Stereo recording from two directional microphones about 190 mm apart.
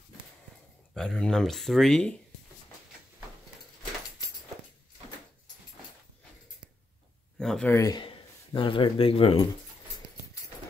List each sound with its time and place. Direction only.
0.9 s speech: 5° left (ahead or behind)
7.3 s speech: 5° left (ahead or behind)
7.7 s speech: 20° left (ahead or behind)